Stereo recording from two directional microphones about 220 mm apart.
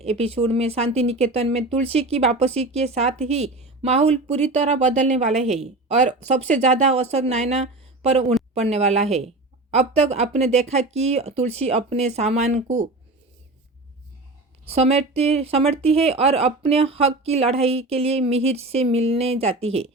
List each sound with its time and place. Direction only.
0.0 s speech: 30° right (ahead or behind)
14.6 s speech: 25° right (ahead or behind)